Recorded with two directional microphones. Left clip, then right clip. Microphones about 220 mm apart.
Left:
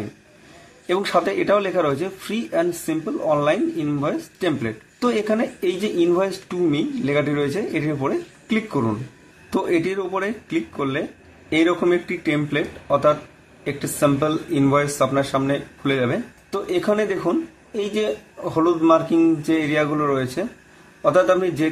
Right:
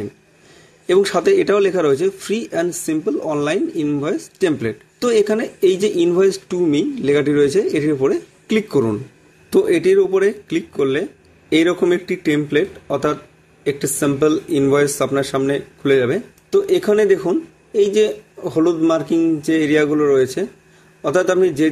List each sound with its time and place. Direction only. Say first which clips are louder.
0.8 s a man's voice: right 5 dB; 40° right (ahead or behind)